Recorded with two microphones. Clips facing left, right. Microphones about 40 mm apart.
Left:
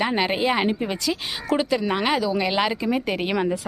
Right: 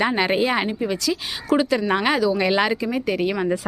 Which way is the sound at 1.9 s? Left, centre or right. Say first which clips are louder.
Right 3 dB; centre.